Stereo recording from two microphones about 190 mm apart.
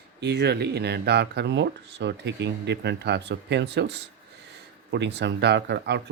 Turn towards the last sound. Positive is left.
turn(degrees=-60)  # may be behind; listen again after turning